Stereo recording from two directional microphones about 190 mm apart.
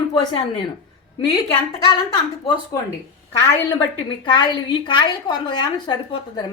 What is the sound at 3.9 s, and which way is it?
A woman's voice, 25° left (ahead or behind).